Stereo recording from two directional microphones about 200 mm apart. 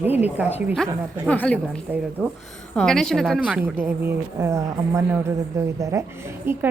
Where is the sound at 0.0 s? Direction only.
10° right (ahead or behind).